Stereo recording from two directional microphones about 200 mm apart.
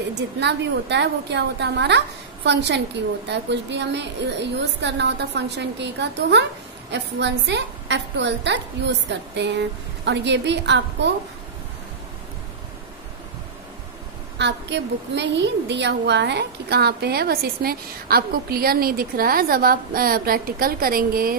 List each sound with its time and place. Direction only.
0.1 s a woman's voice: 60° right (ahead or behind)
14.4 s a woman's voice: 60° right (ahead or behind)